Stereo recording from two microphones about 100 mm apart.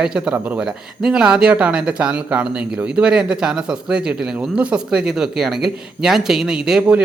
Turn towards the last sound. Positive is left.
turn(degrees=-5)  # may be behind; listen again after turning